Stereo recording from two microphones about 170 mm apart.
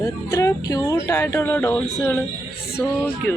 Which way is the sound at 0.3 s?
20° left (ahead or behind).